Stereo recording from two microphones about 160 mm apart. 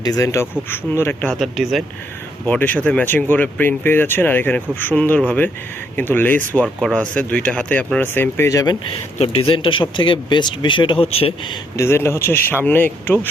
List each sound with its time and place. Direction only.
0.0 s speech: 20° left (ahead or behind)
9.1 s speech: 40° left (ahead or behind)
11.8 s speech: 15° left (ahead or behind)